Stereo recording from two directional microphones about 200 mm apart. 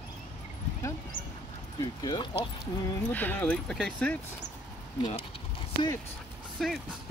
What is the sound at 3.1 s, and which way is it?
Speech, 10° left (ahead or behind).